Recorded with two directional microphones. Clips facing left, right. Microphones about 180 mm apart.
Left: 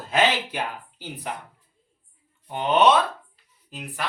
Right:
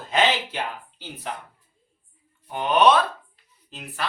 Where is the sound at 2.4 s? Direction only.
25° left (ahead or behind).